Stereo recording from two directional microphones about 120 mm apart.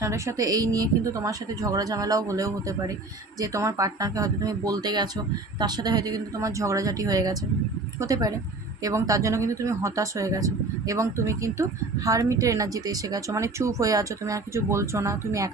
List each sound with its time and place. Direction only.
0.0 s speech: 25° right (ahead or behind)